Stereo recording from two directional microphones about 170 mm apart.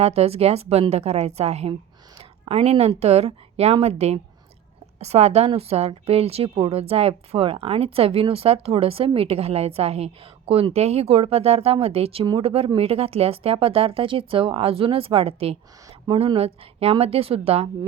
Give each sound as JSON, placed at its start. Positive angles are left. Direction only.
{"t": 0.0, "sound": "a woman's voice", "side_deg": -35}